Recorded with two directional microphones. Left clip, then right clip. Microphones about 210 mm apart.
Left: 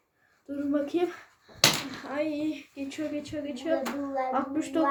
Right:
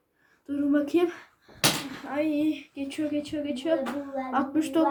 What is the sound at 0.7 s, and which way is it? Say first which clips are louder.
A woman's voice: right 3 dB; 15° right (ahead or behind).